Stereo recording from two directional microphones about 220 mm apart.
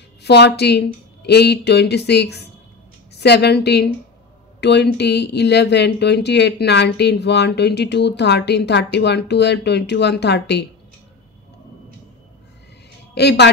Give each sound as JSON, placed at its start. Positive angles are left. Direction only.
{"t": 0.2, "sound": "speech", "side_deg": 50}
{"t": 13.1, "sound": "speech", "side_deg": 50}